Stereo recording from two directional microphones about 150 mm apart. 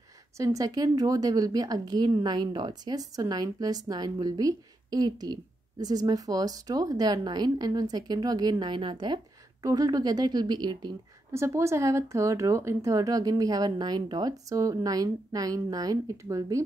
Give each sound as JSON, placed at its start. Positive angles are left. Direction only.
{"t": 0.4, "sound": "a woman's voice", "side_deg": -20}
{"t": 11.3, "sound": "a woman's voice", "side_deg": -20}